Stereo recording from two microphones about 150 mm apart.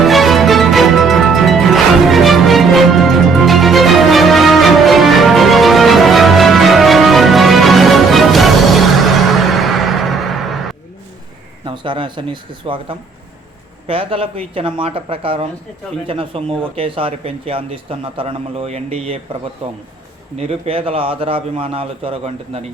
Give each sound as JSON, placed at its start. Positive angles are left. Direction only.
{"t": 0.0, "sound": "music", "side_deg": 0}
{"t": 11.6, "sound": "a sound", "side_deg": -30}
{"t": 13.8, "sound": "speech", "side_deg": -35}
{"t": 20.4, "sound": "speech", "side_deg": -40}